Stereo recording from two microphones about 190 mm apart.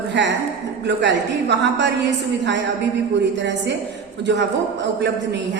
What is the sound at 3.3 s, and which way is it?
A woman's voice, 70° right (ahead or behind).